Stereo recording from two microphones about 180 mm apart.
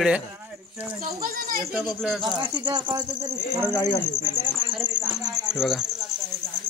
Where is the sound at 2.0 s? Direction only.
Centre (ahead or behind).